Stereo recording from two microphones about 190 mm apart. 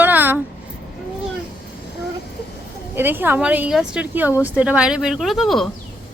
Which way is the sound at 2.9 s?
10° right (ahead or behind).